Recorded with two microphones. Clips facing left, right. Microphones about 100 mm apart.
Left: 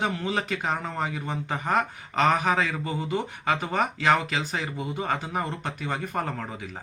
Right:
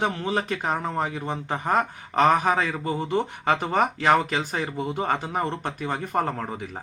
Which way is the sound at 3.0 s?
45° right (ahead or behind).